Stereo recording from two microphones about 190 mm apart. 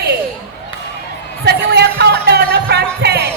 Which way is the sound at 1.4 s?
60° right (ahead or behind).